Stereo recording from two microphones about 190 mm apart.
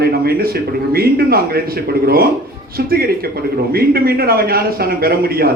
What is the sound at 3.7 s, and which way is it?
Speech, 50° right (ahead or behind).